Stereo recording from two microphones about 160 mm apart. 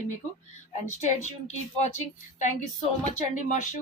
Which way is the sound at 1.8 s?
50° left (ahead or behind).